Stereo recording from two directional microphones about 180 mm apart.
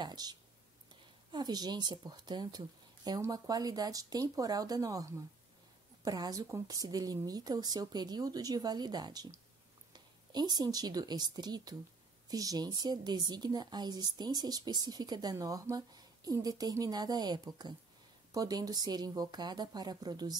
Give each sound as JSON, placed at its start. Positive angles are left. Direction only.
{"t": 0.0, "sound": "a woman's voice", "side_deg": -20}
{"t": 6.0, "sound": "a woman's voice", "side_deg": -20}